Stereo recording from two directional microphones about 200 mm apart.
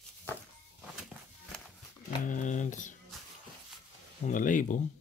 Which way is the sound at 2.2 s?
40° left (ahead or behind).